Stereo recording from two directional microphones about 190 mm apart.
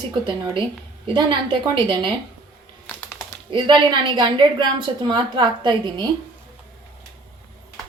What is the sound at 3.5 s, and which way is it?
A woman's voice, 25° right (ahead or behind).